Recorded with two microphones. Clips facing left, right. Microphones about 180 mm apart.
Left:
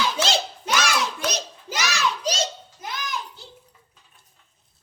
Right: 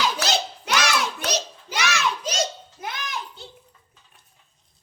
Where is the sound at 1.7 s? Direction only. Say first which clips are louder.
Right 1 dB; 40° left (ahead or behind).